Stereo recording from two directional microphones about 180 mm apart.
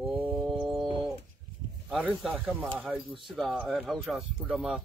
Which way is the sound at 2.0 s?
5° right (ahead or behind).